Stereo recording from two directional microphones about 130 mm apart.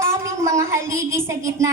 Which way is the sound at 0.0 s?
20° right (ahead or behind).